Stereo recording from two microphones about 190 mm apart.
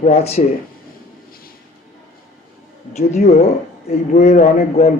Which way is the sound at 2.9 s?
35° left (ahead or behind).